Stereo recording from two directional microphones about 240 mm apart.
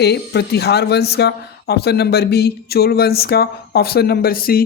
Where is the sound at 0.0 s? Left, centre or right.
Left.